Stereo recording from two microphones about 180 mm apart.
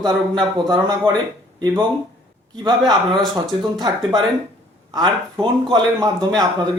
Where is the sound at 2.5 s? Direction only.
25° right (ahead or behind).